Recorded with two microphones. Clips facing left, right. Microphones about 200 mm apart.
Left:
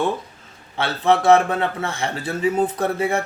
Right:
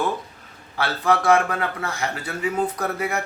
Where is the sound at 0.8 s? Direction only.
25° left (ahead or behind).